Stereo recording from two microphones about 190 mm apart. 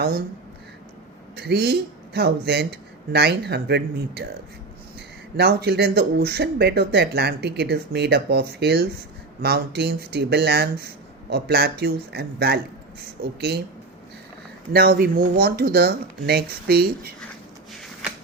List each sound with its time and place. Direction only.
1.4 s speech: 60° right (ahead or behind)
14.7 s speech: 55° right (ahead or behind)